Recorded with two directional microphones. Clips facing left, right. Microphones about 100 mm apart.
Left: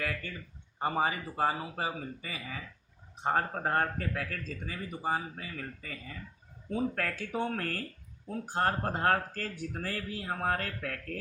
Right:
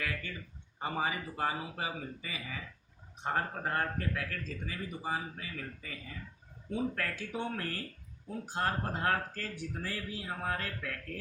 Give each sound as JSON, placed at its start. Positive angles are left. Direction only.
{"t": 0.8, "sound": "speech", "side_deg": 40}